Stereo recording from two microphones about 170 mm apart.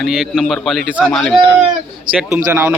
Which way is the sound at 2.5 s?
15° right (ahead or behind).